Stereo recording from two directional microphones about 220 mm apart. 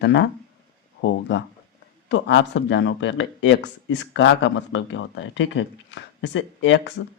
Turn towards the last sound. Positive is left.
turn(degrees=55)  # may be behind; listen again after turning